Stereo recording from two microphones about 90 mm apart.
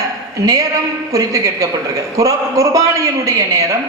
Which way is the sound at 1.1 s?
40° right (ahead or behind).